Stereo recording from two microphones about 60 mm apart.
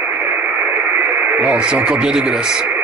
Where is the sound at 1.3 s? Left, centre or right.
Right.